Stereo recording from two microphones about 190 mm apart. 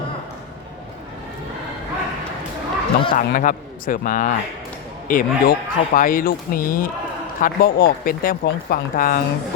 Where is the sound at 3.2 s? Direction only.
45° left (ahead or behind).